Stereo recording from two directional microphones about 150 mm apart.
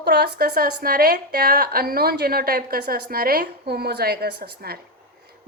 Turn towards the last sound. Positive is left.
turn(degrees=-90)